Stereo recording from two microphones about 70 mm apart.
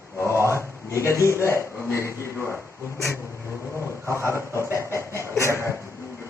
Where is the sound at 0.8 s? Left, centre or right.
Left.